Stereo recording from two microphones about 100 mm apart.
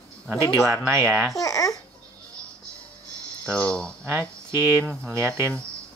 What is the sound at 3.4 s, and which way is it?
Speech, 10° left (ahead or behind).